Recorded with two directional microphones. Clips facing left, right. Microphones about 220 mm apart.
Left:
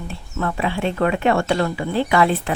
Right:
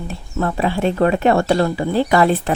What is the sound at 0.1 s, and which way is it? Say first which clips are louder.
Speech: right 4 dB; 35° right (ahead or behind).